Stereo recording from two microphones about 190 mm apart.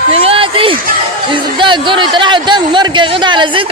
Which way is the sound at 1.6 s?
25° right (ahead or behind).